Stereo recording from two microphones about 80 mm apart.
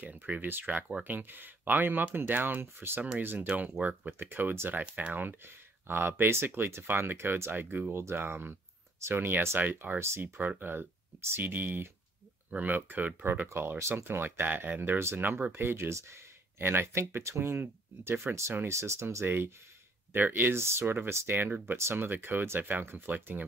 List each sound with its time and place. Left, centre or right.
0.0 s speech: centre
9.9 s speech: right